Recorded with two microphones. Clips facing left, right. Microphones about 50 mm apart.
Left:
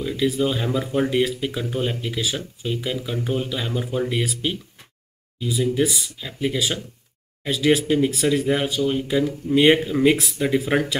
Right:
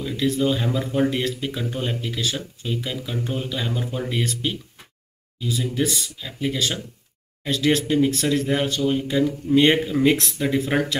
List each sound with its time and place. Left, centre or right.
0.0 s speech: centre